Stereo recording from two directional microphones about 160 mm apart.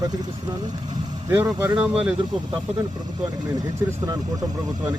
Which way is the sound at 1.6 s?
10° right (ahead or behind).